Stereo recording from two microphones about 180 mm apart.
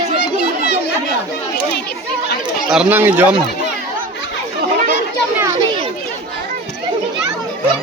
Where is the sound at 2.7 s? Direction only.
10° right (ahead or behind).